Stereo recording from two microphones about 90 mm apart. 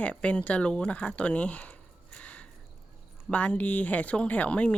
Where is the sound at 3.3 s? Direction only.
15° left (ahead or behind).